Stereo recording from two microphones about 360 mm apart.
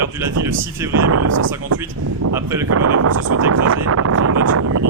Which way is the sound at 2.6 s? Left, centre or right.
Right.